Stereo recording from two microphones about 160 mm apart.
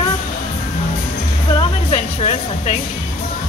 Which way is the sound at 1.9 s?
40° left (ahead or behind).